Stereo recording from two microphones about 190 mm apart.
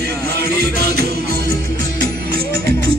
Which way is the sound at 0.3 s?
60° right (ahead or behind).